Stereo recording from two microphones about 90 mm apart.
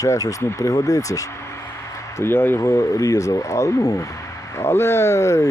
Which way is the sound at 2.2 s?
25° left (ahead or behind).